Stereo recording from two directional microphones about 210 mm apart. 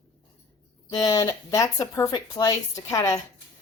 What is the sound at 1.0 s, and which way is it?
Speech, 15° left (ahead or behind).